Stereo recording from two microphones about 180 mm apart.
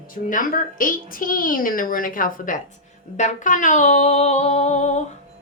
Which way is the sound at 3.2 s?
45° left (ahead or behind).